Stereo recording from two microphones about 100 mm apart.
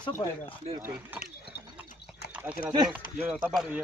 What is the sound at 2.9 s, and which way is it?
Speech, 15° right (ahead or behind).